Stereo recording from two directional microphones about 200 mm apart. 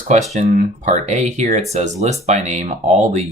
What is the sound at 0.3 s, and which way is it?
Speech, 35° right (ahead or behind).